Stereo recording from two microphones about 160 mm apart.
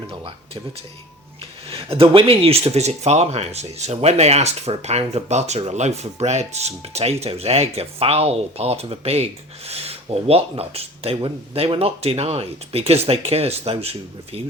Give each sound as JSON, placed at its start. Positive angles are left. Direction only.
{"t": 1.4, "sound": "speech", "side_deg": -35}